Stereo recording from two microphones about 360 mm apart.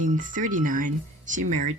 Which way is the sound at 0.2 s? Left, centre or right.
Right.